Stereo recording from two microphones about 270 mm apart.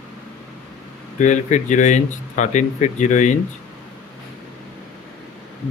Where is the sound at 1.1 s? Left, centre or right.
Left.